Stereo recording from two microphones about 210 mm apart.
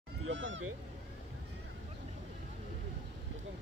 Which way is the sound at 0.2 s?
60° right (ahead or behind).